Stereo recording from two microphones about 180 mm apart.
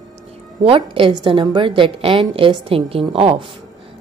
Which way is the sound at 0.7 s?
30° right (ahead or behind).